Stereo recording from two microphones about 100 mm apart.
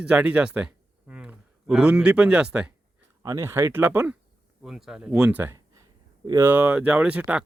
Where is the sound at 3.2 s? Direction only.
30° right (ahead or behind).